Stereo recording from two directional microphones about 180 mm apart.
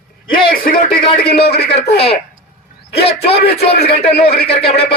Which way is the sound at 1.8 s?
30° left (ahead or behind).